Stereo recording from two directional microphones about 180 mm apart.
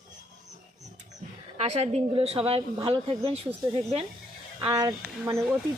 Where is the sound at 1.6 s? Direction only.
40° right (ahead or behind).